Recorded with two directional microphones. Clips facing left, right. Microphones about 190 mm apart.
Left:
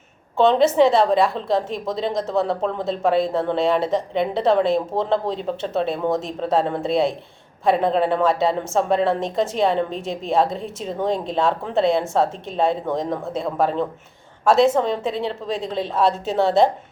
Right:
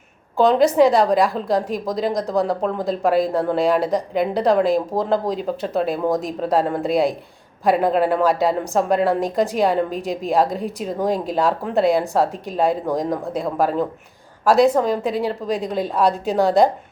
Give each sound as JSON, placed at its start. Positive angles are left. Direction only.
{"t": 0.3, "sound": "a woman's voice", "side_deg": 0}